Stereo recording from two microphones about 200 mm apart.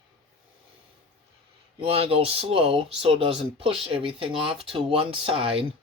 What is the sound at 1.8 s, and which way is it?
Speech, 30° right (ahead or behind).